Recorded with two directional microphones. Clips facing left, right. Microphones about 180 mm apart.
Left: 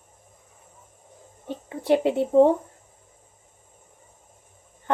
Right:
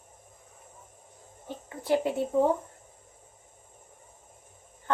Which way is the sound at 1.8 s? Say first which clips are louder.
Left 5 dB; 25° left (ahead or behind).